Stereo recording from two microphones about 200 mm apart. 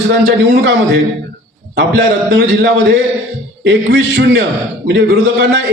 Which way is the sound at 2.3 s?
60° right (ahead or behind).